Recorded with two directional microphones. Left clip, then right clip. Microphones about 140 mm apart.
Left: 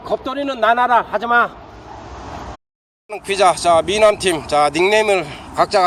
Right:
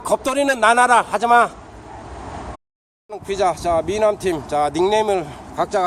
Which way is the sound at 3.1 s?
Centre (ahead or behind).